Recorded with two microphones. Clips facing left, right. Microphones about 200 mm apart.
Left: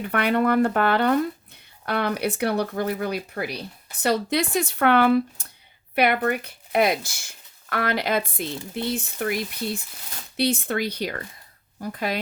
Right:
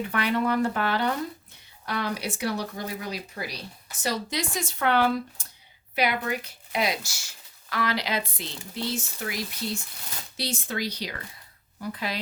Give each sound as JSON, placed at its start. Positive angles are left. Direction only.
{"t": 0.1, "sound": "speech", "side_deg": 60}